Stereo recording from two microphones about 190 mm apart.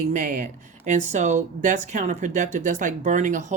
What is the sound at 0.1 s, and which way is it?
Speech, 40° right (ahead or behind).